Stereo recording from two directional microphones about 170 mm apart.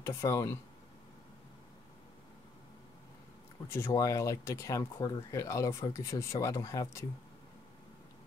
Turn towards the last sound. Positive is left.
turn(degrees=20)  # may be behind; listen again after turning